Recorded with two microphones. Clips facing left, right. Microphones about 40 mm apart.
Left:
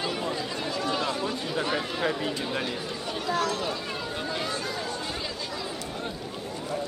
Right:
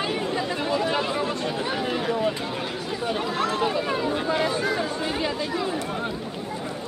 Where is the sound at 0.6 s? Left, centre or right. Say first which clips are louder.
Right 3 dB; right.